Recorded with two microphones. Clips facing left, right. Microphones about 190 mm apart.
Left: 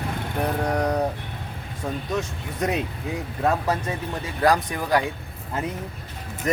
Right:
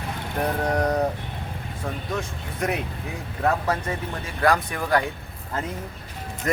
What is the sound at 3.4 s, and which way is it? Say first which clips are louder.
Speech: even; 20° left (ahead or behind).